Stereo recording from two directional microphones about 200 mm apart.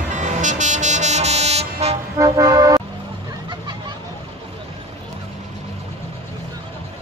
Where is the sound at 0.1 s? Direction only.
35° right (ahead or behind).